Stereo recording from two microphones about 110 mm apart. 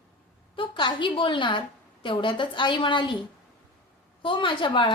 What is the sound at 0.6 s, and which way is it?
A woman's voice, 50° left (ahead or behind).